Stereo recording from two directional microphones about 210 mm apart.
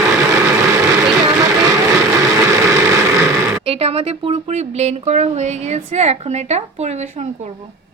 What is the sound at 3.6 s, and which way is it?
Speech, 30° right (ahead or behind).